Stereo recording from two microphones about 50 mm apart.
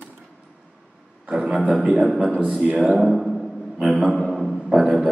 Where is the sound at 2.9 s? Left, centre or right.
Centre.